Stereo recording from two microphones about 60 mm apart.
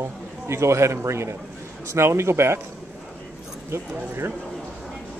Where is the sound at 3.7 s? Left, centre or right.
Right.